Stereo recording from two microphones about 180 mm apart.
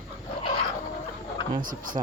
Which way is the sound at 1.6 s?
50° right (ahead or behind).